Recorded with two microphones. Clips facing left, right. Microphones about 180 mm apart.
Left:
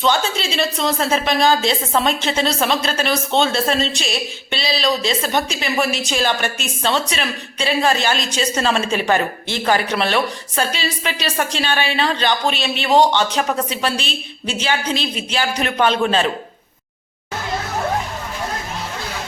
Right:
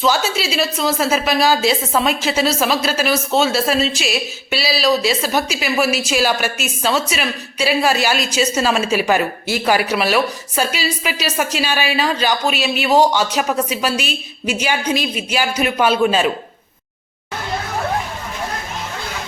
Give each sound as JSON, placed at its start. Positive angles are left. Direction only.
{"t": 0.0, "sound": "a woman's voice", "side_deg": -5}